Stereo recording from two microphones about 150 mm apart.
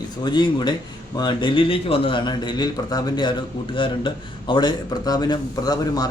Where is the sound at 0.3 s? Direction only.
30° left (ahead or behind).